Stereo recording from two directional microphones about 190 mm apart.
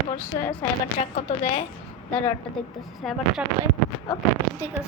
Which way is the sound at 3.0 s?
Centre (ahead or behind).